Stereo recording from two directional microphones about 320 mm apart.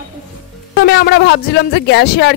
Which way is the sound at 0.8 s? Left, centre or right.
Left.